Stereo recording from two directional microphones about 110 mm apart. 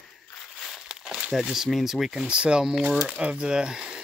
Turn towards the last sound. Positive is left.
turn(degrees=-5)  # may be behind; listen again after turning